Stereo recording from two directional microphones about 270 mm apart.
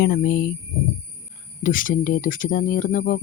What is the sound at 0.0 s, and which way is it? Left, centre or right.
Speech, left.